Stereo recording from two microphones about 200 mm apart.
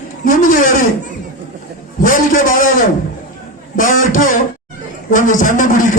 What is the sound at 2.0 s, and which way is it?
Speech, 40° left (ahead or behind).